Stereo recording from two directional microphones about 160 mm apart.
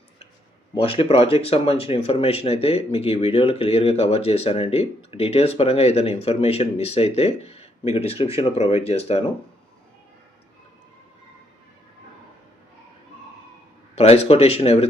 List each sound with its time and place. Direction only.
0.8 s speech: 35° left (ahead or behind)
13.9 s speech: 40° left (ahead or behind)